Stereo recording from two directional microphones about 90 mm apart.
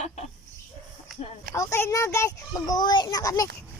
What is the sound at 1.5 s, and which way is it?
A child's voice, 30° left (ahead or behind).